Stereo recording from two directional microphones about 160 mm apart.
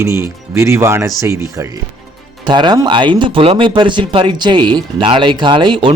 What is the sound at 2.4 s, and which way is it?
Speech, 25° right (ahead or behind).